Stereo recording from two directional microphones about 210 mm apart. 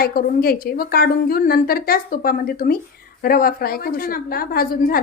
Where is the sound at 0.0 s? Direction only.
45° left (ahead or behind).